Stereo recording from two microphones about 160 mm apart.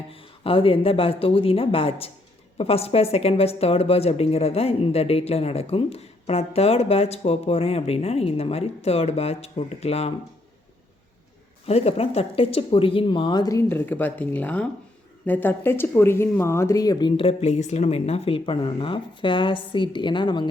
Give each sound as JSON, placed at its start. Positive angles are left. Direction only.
{"t": 0.1, "sound": "a woman's voice", "side_deg": 35}
{"t": 11.6, "sound": "speech", "side_deg": 40}